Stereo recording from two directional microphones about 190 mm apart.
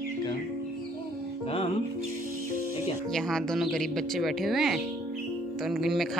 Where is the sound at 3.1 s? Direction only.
Centre (ahead or behind).